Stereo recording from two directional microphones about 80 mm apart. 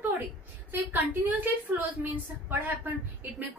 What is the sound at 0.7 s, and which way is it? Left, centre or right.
A woman's voice, right.